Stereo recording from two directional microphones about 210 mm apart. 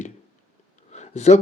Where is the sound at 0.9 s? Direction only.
30° left (ahead or behind).